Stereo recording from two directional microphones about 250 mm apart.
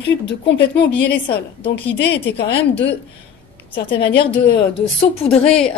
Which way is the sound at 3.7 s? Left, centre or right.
Left.